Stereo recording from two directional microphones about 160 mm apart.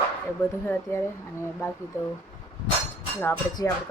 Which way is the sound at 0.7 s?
15° left (ahead or behind).